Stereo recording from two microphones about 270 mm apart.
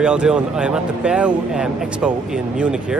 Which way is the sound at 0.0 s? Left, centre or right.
Centre.